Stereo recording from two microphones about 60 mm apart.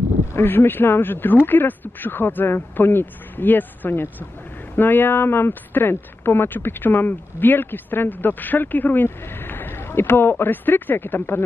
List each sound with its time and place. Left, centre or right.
0.4 s speech: left